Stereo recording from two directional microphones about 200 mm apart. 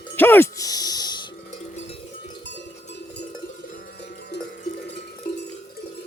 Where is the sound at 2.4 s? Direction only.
60° left (ahead or behind).